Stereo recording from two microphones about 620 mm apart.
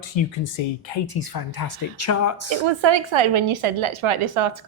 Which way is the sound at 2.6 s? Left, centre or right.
Right.